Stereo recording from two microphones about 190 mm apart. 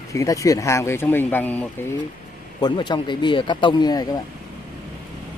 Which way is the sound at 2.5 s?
25° left (ahead or behind).